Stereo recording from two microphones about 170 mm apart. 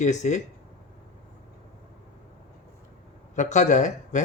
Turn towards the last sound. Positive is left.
turn(degrees=45)  # may be behind; listen again after turning